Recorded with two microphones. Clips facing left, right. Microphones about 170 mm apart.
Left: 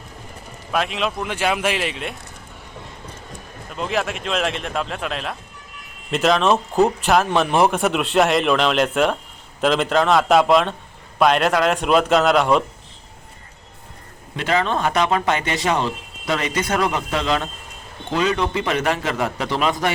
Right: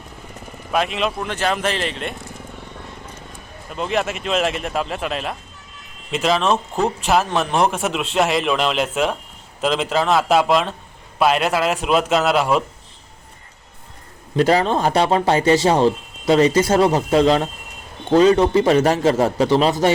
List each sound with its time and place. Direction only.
0.7 s a man's voice: centre (ahead or behind)
3.7 s a man's voice: centre (ahead or behind)
14.3 s speech: 35° right (ahead or behind)